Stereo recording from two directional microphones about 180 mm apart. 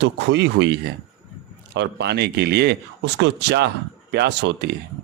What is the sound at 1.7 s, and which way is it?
Speech, 70° right (ahead or behind).